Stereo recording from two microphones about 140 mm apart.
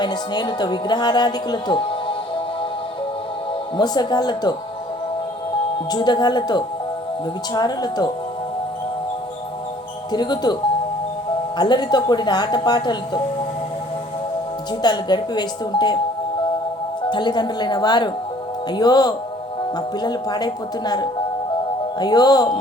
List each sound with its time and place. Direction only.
0.0 s speech: 30° left (ahead or behind)
3.8 s speech: 30° left (ahead or behind)
5.9 s speech: 30° left (ahead or behind)
10.1 s speech: 30° left (ahead or behind)
14.8 s speech: 30° left (ahead or behind)
17.1 s speech: 35° left (ahead or behind)